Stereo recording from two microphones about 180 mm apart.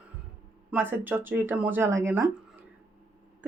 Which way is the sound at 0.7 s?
10° right (ahead or behind).